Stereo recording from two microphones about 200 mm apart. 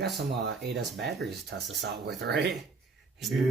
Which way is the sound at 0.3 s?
55° right (ahead or behind).